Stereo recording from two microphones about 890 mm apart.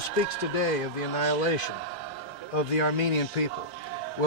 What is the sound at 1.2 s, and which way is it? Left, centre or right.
A man's voice, left.